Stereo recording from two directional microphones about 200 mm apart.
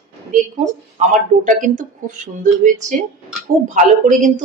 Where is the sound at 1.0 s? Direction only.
40° right (ahead or behind).